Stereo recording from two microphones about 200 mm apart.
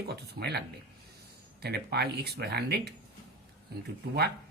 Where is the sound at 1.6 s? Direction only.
55° right (ahead or behind).